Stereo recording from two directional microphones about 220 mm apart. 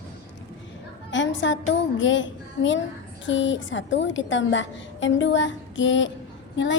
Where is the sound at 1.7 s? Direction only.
55° left (ahead or behind).